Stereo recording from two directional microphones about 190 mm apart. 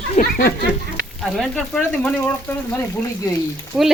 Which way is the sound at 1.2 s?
Centre (ahead or behind).